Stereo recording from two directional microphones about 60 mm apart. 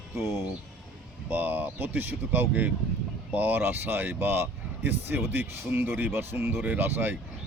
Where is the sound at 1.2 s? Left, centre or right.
Right.